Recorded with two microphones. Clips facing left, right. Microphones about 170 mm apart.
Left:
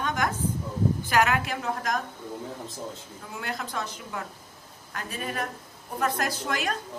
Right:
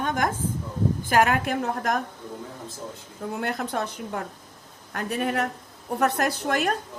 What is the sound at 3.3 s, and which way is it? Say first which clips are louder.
Speech: right 5 dB; 55° right (ahead or behind).